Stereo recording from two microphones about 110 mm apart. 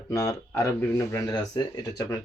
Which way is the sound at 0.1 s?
25° left (ahead or behind).